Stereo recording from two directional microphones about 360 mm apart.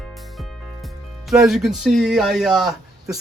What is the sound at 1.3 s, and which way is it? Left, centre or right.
Speech, centre.